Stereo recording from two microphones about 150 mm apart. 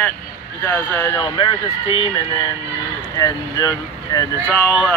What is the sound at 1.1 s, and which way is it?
Speech, 30° left (ahead or behind).